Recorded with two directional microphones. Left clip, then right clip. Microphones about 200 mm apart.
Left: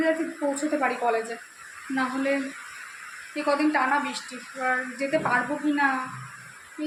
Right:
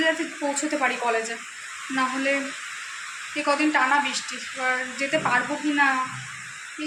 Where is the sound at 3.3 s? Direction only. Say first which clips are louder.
Right 2 dB; 5° left (ahead or behind).